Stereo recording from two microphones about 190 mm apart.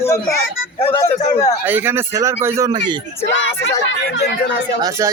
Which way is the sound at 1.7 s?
10° right (ahead or behind).